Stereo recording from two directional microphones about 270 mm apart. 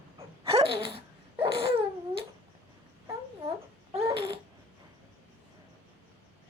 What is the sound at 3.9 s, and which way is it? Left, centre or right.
Babbling, centre.